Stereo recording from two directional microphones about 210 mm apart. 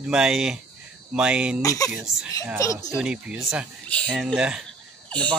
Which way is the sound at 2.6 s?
15° left (ahead or behind).